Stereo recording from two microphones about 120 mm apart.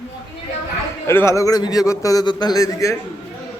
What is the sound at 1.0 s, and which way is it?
A man's voice, 20° left (ahead or behind).